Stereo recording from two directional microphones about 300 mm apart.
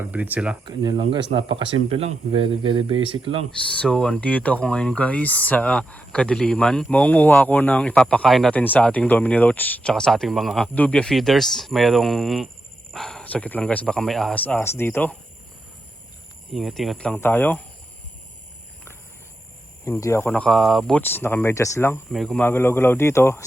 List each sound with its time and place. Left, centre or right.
0.0 s speech: centre
3.7 s speech: centre
16.5 s speech: centre
19.8 s speech: centre